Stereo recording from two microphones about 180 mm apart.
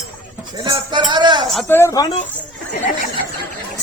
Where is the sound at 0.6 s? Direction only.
25° right (ahead or behind).